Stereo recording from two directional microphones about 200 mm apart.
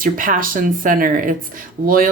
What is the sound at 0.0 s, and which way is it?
Speech, 45° right (ahead or behind).